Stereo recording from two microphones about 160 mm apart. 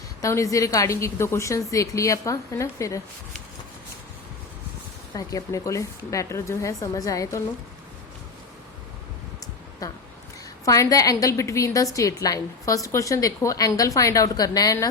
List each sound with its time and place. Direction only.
0.2 s a woman's voice: 20° left (ahead or behind)
5.1 s a woman's voice: 20° left (ahead or behind)
9.8 s a woman's voice: 25° left (ahead or behind)